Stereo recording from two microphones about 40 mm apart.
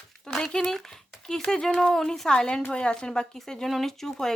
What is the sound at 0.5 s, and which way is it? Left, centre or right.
A woman's voice, centre.